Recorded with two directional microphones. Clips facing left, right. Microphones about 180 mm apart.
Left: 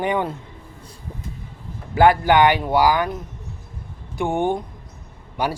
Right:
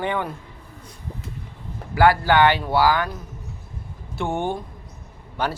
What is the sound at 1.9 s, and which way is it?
Speech, 20° left (ahead or behind).